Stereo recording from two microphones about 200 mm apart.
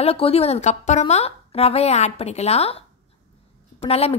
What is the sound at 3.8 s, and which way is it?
Speech, 30° left (ahead or behind).